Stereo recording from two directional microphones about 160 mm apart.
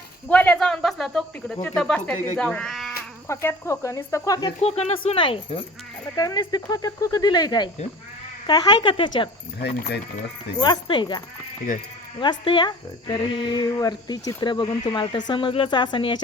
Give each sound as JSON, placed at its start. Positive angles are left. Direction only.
{"t": 0.3, "sound": "speech", "side_deg": 10}
{"t": 3.2, "sound": "speech", "side_deg": 20}
{"t": 4.6, "sound": "speech", "side_deg": 40}
{"t": 6.1, "sound": "speech", "side_deg": 20}
{"t": 9.6, "sound": "speech", "side_deg": 80}
{"t": 10.6, "sound": "speech", "side_deg": 30}
{"t": 12.2, "sound": "speech", "side_deg": 30}